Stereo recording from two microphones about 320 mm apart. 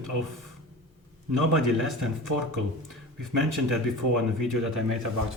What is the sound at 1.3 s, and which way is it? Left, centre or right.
Speech, right.